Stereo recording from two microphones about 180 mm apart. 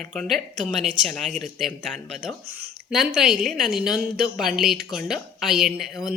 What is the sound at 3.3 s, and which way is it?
Speech, 50° right (ahead or behind).